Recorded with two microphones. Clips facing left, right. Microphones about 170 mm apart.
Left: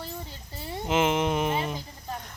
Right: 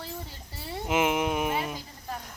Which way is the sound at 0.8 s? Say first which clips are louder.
Left 1 dB; 5° right (ahead or behind).